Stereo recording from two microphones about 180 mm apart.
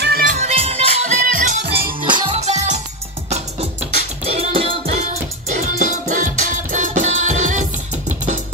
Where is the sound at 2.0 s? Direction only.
25° right (ahead or behind).